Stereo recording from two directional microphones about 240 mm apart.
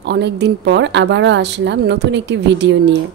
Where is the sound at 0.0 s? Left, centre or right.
Right.